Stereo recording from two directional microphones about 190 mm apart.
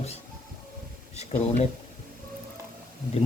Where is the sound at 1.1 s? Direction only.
35° left (ahead or behind).